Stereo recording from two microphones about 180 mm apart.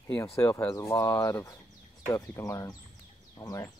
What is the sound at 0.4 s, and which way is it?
Speech, 15° left (ahead or behind).